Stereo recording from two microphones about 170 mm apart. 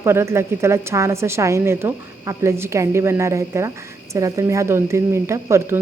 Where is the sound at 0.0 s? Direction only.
15° right (ahead or behind).